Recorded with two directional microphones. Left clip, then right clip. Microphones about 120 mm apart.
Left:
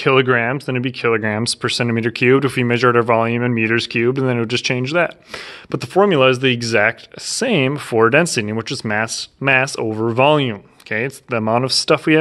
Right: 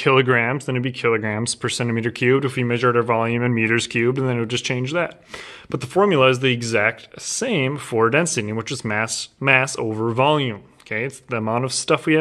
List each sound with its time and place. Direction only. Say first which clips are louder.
0.0 s speech: left 2 dB; 30° left (ahead or behind); by 3.2 s 65° left (ahead or behind)
3.2 s speech: left 3 dB; 35° left (ahead or behind)
5.7 s speech: left 3 dB; 35° left (ahead or behind)